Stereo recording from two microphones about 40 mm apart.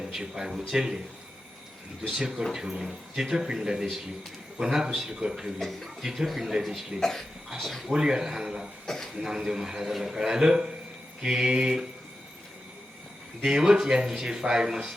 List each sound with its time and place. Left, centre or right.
0.0 s speech: centre
2.0 s speech: centre
5.5 s speech: centre
6.0 s speech: centre
7.0 s speech: centre
7.9 s speech: centre
13.4 s speech: centre